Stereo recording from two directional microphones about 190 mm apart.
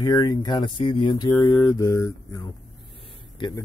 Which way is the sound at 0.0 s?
20° left (ahead or behind).